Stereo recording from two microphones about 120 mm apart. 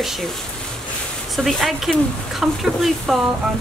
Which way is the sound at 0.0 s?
Centre (ahead or behind).